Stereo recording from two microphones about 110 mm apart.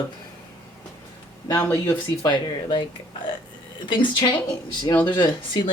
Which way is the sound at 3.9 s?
40° left (ahead or behind).